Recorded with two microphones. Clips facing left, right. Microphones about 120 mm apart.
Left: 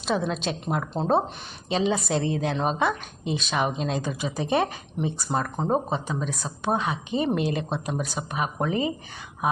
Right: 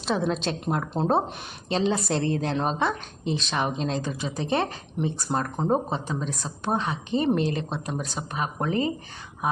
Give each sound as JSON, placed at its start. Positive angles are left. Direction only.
{"t": 0.0, "sound": "a woman's voice", "side_deg": 0}